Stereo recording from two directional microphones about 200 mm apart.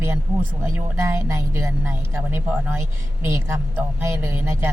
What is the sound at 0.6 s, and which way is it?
Speech, 15° right (ahead or behind).